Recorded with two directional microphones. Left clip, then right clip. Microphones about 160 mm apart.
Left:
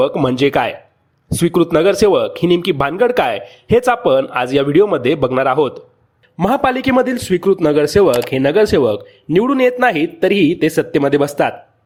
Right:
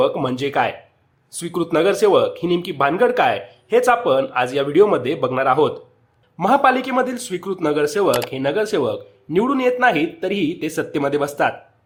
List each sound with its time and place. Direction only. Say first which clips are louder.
0.3 s speech: left 5 dB; 40° left (ahead or behind)